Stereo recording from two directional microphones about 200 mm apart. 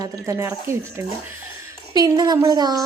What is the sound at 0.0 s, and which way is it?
A woman's voice, 15° right (ahead or behind).